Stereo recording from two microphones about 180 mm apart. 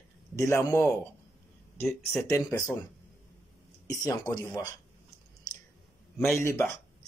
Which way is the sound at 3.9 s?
20° left (ahead or behind).